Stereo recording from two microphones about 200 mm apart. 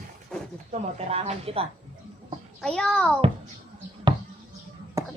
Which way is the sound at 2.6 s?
5° left (ahead or behind).